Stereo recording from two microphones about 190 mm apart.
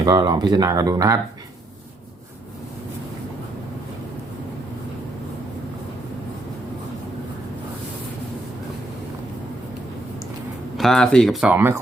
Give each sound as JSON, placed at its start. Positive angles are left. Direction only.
{"t": 0.0, "sound": "speech", "side_deg": -20}
{"t": 10.8, "sound": "speech", "side_deg": 0}